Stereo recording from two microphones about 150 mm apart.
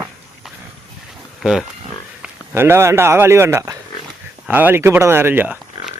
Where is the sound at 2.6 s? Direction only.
15° right (ahead or behind).